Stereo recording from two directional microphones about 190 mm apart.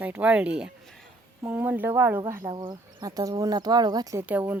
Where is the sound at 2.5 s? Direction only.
25° right (ahead or behind).